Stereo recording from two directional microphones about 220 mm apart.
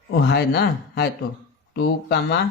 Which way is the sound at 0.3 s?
50° left (ahead or behind).